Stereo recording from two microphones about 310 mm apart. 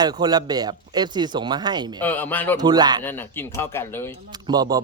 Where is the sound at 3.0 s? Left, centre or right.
Centre.